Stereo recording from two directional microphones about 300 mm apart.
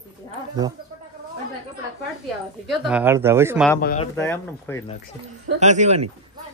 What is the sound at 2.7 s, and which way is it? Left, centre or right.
Speech, centre.